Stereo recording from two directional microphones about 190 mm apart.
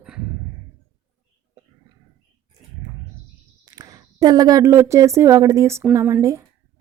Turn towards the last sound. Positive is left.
turn(degrees=-15)  # may be behind; listen again after turning